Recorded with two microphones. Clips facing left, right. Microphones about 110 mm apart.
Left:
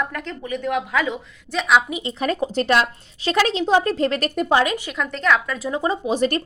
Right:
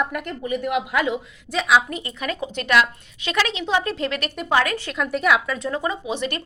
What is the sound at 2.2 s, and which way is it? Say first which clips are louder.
A woman's voice: left 7 dB; 40° left (ahead or behind).